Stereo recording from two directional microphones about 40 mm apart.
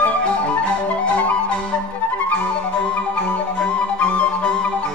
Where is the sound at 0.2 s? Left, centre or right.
Left.